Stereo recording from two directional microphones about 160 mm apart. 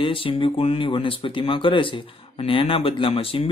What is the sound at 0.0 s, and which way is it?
Speech, 35° left (ahead or behind).